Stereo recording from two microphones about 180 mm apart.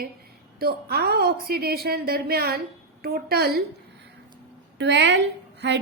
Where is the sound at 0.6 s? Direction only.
60° right (ahead or behind).